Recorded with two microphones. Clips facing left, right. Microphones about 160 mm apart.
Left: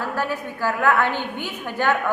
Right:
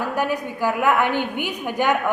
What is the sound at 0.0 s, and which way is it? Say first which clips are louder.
A woman's voice: right 3 dB; 15° right (ahead or behind).